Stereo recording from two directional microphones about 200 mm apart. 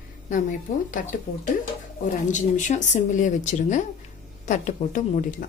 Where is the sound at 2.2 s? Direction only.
40° left (ahead or behind).